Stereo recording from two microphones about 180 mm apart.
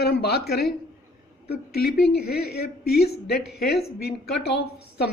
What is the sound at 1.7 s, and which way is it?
Speech, 60° left (ahead or behind).